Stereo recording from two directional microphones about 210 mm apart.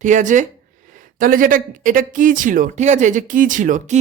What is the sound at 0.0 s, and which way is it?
A man's voice, 35° right (ahead or behind).